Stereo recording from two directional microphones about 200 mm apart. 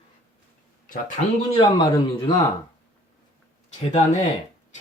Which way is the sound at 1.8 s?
20° left (ahead or behind).